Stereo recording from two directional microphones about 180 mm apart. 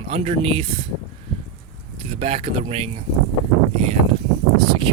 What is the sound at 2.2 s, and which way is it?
Speech, 35° right (ahead or behind).